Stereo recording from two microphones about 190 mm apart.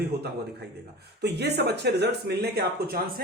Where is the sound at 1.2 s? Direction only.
60° right (ahead or behind).